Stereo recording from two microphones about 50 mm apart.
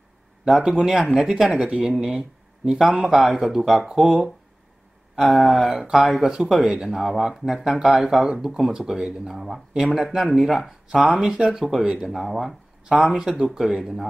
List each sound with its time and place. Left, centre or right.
0.5 s speech: centre
5.5 s speech: centre
6.2 s speech: centre
6.9 s speech: centre